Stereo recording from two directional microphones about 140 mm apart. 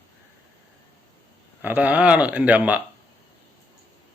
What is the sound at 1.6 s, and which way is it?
A man's voice, 10° right (ahead or behind).